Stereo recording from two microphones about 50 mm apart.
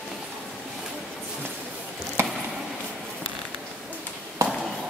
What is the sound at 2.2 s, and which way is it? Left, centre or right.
Chop, right.